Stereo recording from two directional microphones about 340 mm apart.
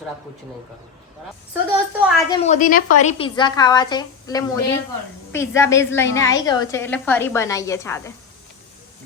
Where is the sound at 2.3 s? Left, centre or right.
Centre.